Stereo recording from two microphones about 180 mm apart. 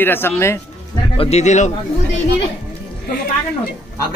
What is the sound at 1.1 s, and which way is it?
Speech, 35° left (ahead or behind).